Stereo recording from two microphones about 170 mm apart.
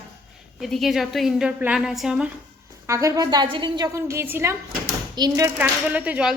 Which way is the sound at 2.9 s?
20° right (ahead or behind).